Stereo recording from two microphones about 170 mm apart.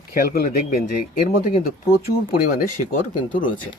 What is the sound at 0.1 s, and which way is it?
Speech, 60° left (ahead or behind).